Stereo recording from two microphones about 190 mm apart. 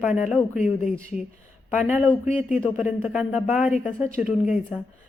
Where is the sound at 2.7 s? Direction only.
5° right (ahead or behind).